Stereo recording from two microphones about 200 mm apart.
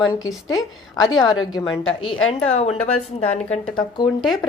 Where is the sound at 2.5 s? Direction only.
30° left (ahead or behind).